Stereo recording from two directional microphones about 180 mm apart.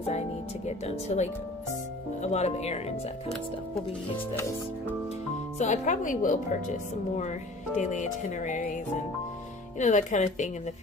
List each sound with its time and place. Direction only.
0.7 s speech: 35° left (ahead or behind)
5.6 s speech: 40° left (ahead or behind)
9.8 s speech: 40° left (ahead or behind)